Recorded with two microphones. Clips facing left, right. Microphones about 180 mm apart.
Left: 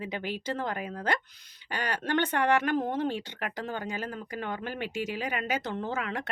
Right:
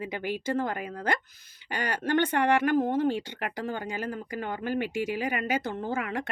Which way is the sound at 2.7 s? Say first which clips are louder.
Right 4 dB; 50° right (ahead or behind).